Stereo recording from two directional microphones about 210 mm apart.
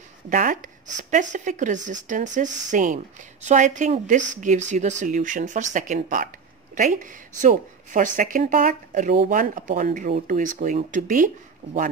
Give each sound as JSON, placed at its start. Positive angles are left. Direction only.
{"t": 0.3, "sound": "speech", "side_deg": -40}